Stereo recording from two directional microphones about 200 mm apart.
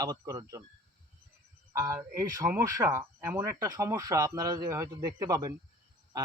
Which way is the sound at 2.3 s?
15° right (ahead or behind).